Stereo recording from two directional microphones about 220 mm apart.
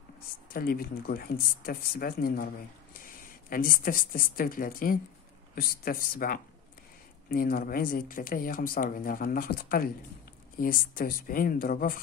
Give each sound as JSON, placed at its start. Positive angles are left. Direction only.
{"t": 0.5, "sound": "speech", "side_deg": 40}